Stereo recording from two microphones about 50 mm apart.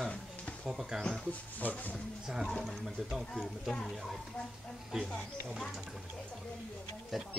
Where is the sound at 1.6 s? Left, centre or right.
Left.